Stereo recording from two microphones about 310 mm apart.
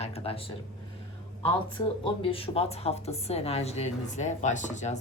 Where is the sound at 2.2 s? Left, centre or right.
Centre.